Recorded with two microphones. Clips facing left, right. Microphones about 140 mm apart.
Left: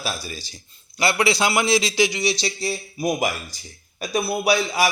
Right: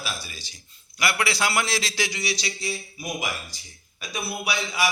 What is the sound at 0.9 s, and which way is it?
A man's voice, 25° left (ahead or behind).